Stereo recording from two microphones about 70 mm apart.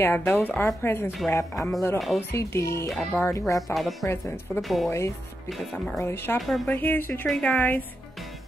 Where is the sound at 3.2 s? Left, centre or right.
Left.